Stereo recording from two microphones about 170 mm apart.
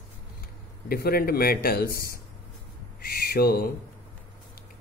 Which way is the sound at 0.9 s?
65° left (ahead or behind).